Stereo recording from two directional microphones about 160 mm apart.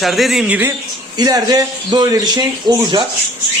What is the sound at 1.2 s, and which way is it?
Speech, 25° right (ahead or behind).